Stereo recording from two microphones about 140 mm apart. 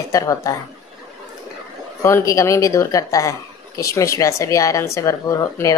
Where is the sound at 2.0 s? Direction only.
20° left (ahead or behind).